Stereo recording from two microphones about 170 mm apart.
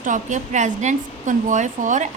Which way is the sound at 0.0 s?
45° right (ahead or behind).